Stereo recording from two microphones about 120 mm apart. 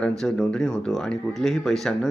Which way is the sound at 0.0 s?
5° left (ahead or behind).